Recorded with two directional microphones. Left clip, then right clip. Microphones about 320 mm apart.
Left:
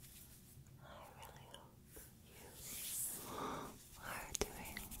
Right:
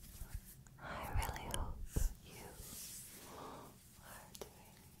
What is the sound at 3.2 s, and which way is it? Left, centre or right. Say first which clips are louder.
Whispering: left 6 dB; left.